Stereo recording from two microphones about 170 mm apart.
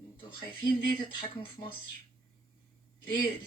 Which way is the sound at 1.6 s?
35° left (ahead or behind).